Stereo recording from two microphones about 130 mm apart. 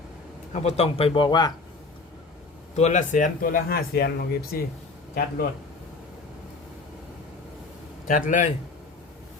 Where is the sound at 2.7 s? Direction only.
65° left (ahead or behind); by 3.6 s 90° left.